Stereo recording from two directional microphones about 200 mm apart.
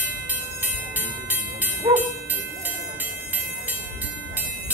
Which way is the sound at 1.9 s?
25° right (ahead or behind).